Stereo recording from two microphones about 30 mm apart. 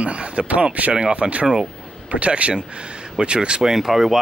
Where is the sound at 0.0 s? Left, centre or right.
Right.